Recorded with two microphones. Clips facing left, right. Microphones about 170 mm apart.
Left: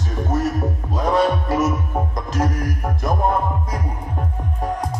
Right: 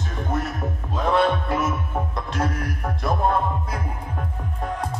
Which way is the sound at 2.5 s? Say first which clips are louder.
Left 3 dB; 40° left (ahead or behind).